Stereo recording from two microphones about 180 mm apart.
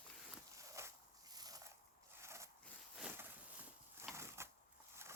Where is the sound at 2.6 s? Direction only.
Centre (ahead or behind).